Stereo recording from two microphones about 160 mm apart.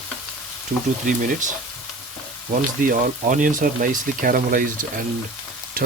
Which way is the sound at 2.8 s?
60° right (ahead or behind).